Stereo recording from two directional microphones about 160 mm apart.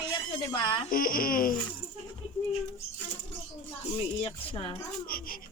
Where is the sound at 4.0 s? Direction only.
35° left (ahead or behind).